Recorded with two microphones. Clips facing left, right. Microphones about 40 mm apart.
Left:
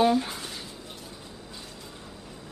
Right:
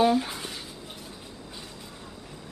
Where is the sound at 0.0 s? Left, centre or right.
Centre.